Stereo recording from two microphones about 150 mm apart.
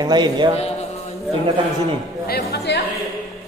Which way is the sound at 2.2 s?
90° left.